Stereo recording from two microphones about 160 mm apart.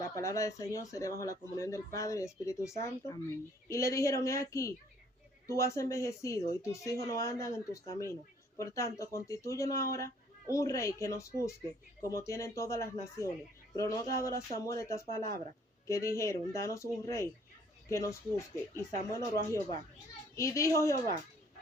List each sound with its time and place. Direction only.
0.2 s speech: 20° left (ahead or behind)